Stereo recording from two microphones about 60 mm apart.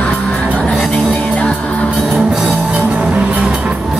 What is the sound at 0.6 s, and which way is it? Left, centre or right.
Music, centre.